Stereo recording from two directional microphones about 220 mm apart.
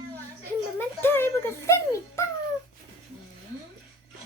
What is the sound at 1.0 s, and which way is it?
A child's voice, 10° left (ahead or behind).